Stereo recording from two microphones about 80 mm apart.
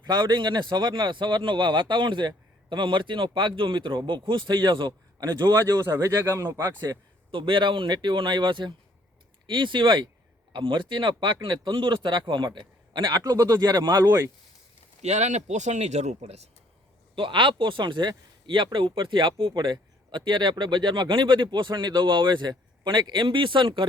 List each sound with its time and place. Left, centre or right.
0.0 s speech: right
5.5 s speech: right
6.7 s speech: right
9.5 s speech: right
13.3 s speech: right
14.0 s speech: right
17.2 s speech: right
18.4 s speech: right